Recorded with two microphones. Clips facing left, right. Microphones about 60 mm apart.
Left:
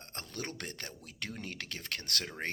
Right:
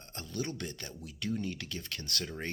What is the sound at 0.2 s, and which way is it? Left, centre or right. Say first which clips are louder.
Speech: right 4 dB; left.